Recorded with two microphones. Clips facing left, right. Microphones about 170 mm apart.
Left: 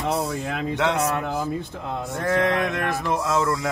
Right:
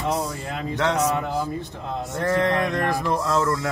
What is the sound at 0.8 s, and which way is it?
Speech, 10° left (ahead or behind).